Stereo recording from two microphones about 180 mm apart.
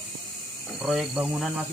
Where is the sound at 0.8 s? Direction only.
5° right (ahead or behind).